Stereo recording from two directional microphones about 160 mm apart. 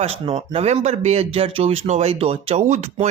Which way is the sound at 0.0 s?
35° right (ahead or behind).